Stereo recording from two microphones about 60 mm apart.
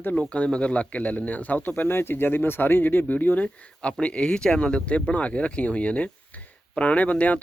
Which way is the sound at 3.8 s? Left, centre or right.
Centre.